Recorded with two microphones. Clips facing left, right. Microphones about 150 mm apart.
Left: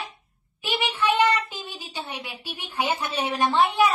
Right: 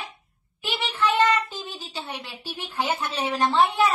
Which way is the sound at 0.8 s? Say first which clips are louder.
Even; 10° left (ahead or behind).